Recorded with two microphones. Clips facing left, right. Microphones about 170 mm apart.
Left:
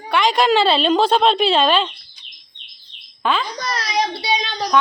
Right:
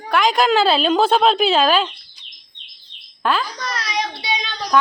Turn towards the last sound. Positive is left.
turn(degrees=35)  # may be behind; listen again after turning